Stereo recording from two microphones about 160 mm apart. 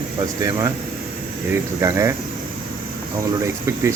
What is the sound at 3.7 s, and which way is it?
Speech, 20° right (ahead or behind).